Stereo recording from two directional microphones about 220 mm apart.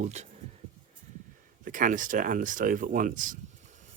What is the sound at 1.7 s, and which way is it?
Speech, 35° right (ahead or behind).